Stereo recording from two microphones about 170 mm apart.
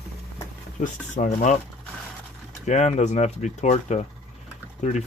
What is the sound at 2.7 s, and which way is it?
Speech, 45° left (ahead or behind).